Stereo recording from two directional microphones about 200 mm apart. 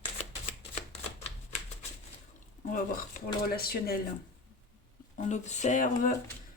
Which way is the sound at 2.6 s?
40° left (ahead or behind).